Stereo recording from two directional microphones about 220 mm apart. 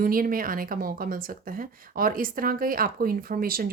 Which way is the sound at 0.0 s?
40° right (ahead or behind).